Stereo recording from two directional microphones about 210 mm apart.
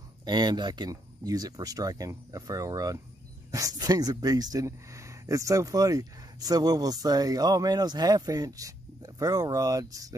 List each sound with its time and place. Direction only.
0.2 s speech: 20° right (ahead or behind)